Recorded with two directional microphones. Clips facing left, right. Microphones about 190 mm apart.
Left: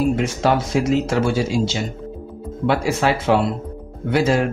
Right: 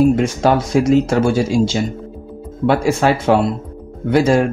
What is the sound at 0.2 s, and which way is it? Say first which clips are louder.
Speech: right 4 dB; 45° right (ahead or behind).